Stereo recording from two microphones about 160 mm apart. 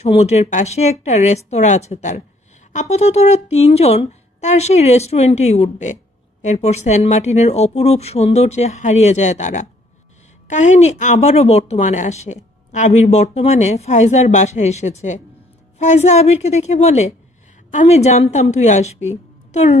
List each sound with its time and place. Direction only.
0.0 s speech: 45° left (ahead or behind)